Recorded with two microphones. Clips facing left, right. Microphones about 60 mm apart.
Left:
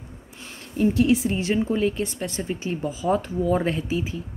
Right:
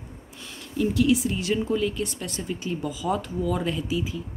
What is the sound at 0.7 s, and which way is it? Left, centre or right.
Speech, left.